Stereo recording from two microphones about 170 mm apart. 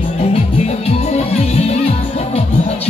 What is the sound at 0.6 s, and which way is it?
Music, 40° left (ahead or behind).